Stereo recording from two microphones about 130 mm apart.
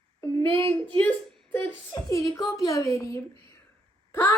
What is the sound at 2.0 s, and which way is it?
Child singing, 25° left (ahead or behind).